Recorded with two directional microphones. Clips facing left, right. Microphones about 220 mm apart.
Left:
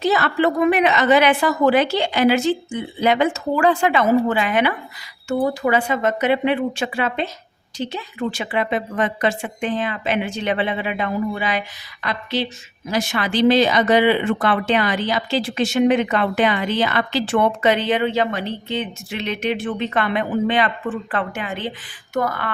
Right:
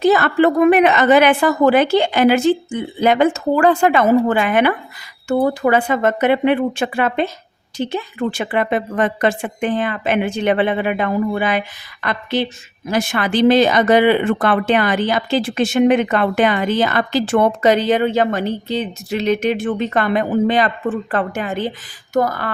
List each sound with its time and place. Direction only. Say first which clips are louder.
0.0 s speech: right 5 dB; 50° right (ahead or behind)